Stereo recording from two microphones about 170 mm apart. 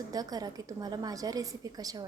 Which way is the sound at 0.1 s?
20° right (ahead or behind).